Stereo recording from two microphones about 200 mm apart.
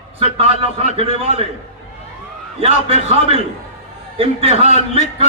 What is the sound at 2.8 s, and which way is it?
A man's voice, 30° right (ahead or behind).